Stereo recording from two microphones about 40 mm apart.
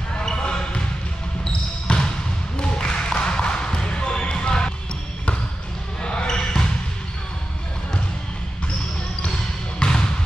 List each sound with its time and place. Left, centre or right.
0.2 s basketball bounce: centre
6.0 s basketball bounce: left
9.8 s basketball bounce: centre